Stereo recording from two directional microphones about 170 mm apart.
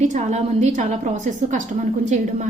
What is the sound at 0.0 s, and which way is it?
A woman's voice, 45° right (ahead or behind).